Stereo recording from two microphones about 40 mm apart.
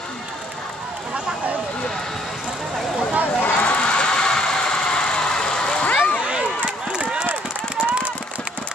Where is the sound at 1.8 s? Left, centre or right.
Centre.